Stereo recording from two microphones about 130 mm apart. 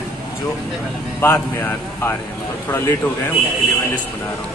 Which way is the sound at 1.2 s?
15° left (ahead or behind).